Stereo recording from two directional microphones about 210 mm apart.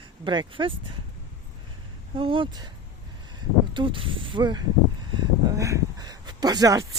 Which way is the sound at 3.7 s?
25° right (ahead or behind).